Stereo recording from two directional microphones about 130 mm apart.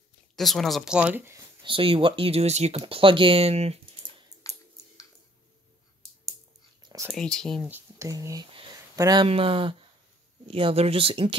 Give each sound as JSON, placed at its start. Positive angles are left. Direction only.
{"t": 0.4, "sound": "speech", "side_deg": 0}
{"t": 1.6, "sound": "speech", "side_deg": -45}
{"t": 2.8, "sound": "speech", "side_deg": -40}
{"t": 4.4, "sound": "a sound", "side_deg": 25}
{"t": 6.8, "sound": "whispering", "side_deg": -30}
{"t": 7.1, "sound": "speech", "side_deg": 5}
{"t": 7.6, "sound": "speech", "side_deg": -15}
{"t": 8.1, "sound": "speech", "side_deg": -25}
{"t": 9.3, "sound": "speech", "side_deg": -45}